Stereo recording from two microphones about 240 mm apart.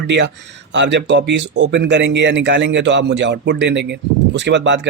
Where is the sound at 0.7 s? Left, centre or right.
Right.